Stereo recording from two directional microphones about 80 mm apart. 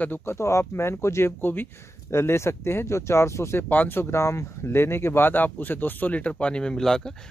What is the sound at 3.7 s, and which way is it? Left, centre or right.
Speech, left.